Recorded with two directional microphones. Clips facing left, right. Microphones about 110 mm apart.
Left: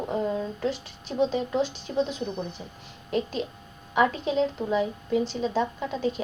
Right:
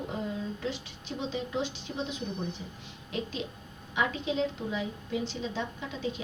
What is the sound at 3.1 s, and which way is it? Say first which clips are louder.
A woman's voice: left 7 dB; 45° left (ahead or behind).